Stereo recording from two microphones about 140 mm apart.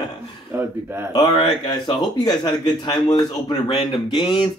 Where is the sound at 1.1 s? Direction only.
30° left (ahead or behind).